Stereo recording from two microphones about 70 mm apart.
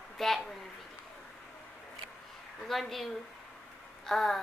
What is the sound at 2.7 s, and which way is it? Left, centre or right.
Speech, centre.